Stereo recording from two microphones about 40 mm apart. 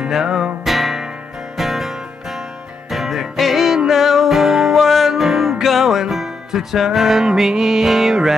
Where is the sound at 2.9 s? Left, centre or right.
Centre.